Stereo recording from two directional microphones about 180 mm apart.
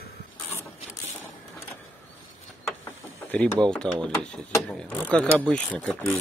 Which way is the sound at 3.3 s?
5° left (ahead or behind).